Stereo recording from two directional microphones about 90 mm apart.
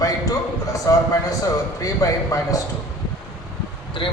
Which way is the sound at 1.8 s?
40° left (ahead or behind).